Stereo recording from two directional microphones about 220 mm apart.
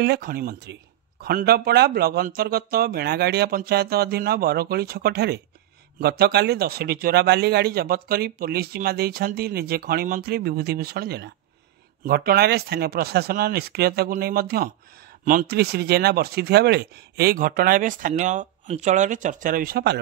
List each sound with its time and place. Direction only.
0.0 s speech: 45° right (ahead or behind)